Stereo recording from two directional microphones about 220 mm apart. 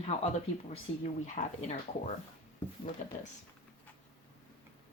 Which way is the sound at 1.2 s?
35° left (ahead or behind).